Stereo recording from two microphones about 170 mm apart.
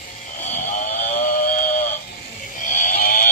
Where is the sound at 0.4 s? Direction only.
45° left (ahead or behind).